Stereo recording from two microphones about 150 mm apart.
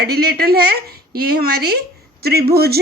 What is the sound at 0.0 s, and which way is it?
A woman's voice, 90° right.